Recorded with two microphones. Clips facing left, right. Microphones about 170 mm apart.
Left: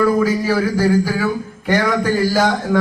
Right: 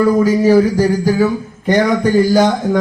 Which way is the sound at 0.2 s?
15° right (ahead or behind).